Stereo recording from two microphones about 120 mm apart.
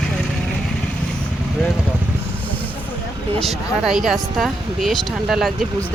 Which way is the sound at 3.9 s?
5° right (ahead or behind).